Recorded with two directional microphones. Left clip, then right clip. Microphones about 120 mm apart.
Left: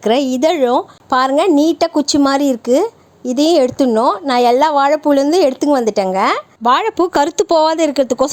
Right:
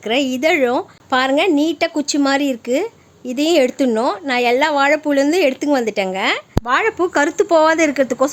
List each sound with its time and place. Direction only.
0.0 s speech: 40° left (ahead or behind)
6.7 s speech: 50° left (ahead or behind)